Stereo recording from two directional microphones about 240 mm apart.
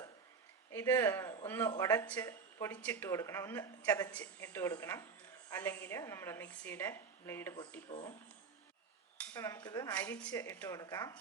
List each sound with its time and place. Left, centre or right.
0.7 s speech: centre
7.9 s speech: left
9.1 s speech: centre